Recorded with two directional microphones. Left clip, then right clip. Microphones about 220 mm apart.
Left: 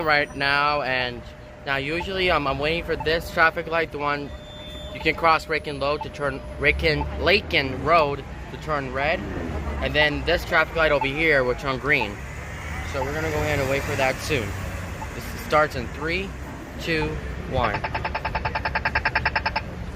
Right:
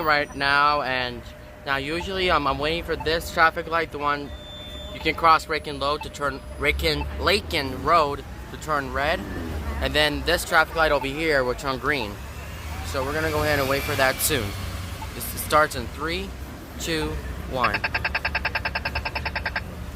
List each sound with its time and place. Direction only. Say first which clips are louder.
0.0 s speech: left 1 dB; 15° right (ahead or behind)
12.9 s speech: right 2 dB; 30° right (ahead or behind)
15.4 s speech: even; 15° right (ahead or behind)
17.5 s a sound: right 1 dB; 10° right (ahead or behind)
19.0 s frog: left 5 dB; 20° right (ahead or behind)